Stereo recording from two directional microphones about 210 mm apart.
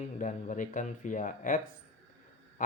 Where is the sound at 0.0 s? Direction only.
35° left (ahead or behind).